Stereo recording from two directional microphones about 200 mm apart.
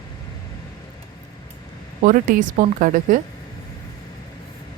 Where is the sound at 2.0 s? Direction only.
40° right (ahead or behind).